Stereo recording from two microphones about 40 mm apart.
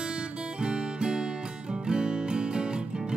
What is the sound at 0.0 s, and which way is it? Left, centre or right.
Music, right.